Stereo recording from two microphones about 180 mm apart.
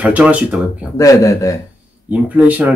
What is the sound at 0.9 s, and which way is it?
Speech, 20° left (ahead or behind).